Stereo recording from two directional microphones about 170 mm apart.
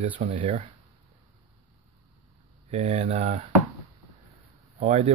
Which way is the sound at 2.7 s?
40° right (ahead or behind).